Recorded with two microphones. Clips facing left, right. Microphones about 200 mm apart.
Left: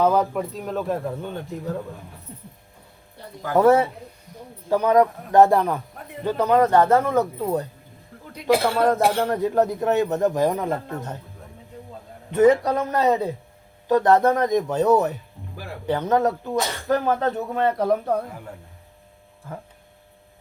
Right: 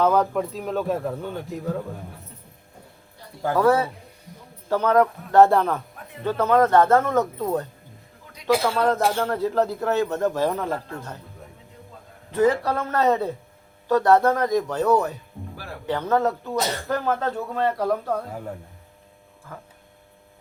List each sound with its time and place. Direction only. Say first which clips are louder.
0.0 s a man's voice: even; 10° left (ahead or behind)
3.5 s a man's voice: left 3 dB; 20° left (ahead or behind)
12.3 s a man's voice: left 4 dB; 20° left (ahead or behind)